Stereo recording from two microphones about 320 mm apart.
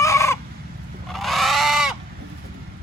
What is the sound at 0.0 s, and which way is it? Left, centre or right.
Chicken, centre.